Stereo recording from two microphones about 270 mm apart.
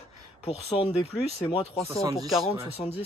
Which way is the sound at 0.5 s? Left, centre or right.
Left.